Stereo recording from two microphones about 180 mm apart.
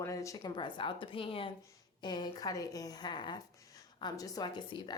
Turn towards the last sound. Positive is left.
turn(degrees=20)  # may be behind; listen again after turning